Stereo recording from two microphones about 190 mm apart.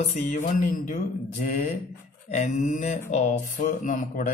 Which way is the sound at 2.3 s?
40° left (ahead or behind).